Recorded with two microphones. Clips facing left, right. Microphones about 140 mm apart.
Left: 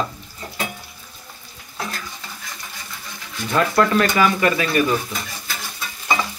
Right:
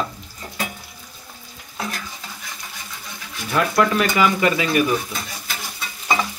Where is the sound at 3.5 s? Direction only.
5° right (ahead or behind).